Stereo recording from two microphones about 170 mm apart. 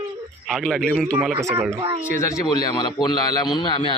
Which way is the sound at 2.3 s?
25° left (ahead or behind).